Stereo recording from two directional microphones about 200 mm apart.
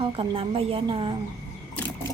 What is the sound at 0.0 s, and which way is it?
Speech, 25° right (ahead or behind).